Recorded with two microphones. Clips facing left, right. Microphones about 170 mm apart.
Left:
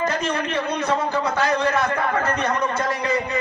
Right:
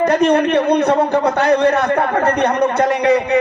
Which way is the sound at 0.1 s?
65° right (ahead or behind).